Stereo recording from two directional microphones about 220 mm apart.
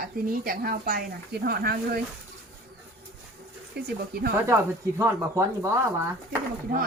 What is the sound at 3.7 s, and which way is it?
Speech, 45° right (ahead or behind).